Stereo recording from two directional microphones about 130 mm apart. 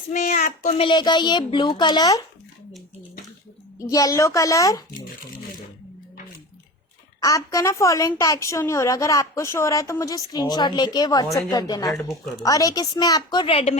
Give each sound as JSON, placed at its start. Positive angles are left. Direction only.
{"t": 0.1, "sound": "speech", "side_deg": 75}
{"t": 0.7, "sound": "speech", "side_deg": 40}
{"t": 3.8, "sound": "a woman's voice", "side_deg": 25}
{"t": 7.2, "sound": "a woman's voice", "side_deg": 25}
{"t": 10.3, "sound": "a woman's voice", "side_deg": 35}
{"t": 11.9, "sound": "speech", "side_deg": 0}
{"t": 12.4, "sound": "speech", "side_deg": 25}